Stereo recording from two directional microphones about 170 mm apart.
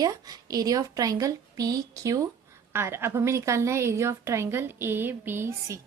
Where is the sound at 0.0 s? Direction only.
20° right (ahead or behind).